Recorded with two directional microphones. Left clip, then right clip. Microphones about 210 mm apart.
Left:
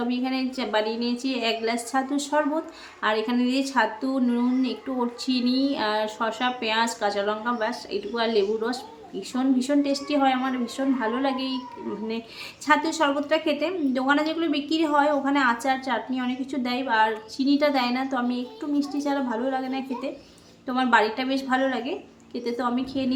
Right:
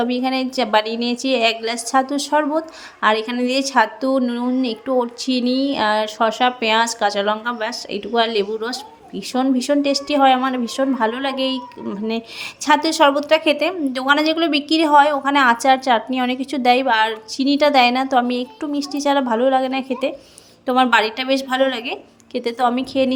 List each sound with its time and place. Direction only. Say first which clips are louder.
0.0 s a woman's voice: right 7 dB; 35° right (ahead or behind)
12.6 s a woman's voice: right 7 dB; 40° right (ahead or behind)